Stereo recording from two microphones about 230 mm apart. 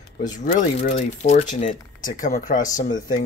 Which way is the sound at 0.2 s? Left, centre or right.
Left.